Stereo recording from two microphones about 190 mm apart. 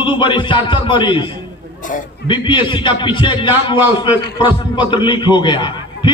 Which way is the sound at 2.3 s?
25° left (ahead or behind).